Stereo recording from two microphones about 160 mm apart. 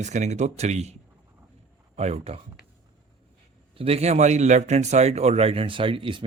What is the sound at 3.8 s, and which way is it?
Speech, 40° right (ahead or behind).